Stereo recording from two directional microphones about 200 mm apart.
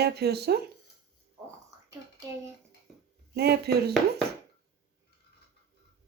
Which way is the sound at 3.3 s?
55° right (ahead or behind).